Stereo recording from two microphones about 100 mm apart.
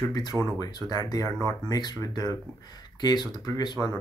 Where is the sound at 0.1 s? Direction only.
40° left (ahead or behind).